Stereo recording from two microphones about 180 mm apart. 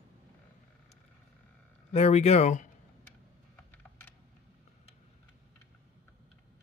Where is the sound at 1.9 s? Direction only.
35° left (ahead or behind).